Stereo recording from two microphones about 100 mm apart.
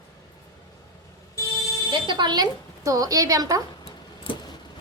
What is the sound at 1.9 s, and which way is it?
A woman's voice, 50° right (ahead or behind).